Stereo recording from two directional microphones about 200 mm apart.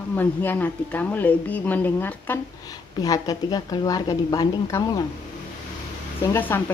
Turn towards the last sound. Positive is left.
turn(degrees=10)  # may be behind; listen again after turning